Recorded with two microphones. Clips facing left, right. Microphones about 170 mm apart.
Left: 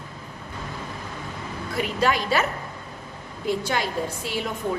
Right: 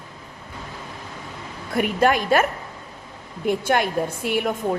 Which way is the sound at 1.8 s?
50° right (ahead or behind).